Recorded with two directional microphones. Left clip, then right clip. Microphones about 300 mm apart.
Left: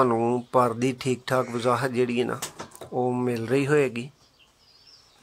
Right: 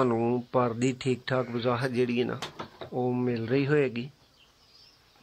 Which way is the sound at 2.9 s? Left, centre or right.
Left.